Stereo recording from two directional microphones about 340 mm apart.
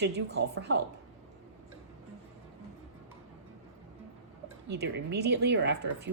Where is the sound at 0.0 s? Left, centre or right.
Right.